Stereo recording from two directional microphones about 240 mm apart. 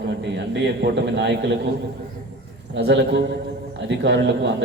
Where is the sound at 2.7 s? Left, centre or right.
Right.